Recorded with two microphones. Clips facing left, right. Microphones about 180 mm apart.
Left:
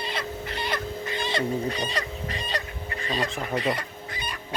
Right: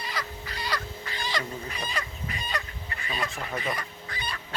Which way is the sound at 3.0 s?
35° left (ahead or behind).